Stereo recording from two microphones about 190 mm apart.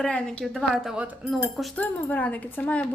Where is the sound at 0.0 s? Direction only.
5° left (ahead or behind).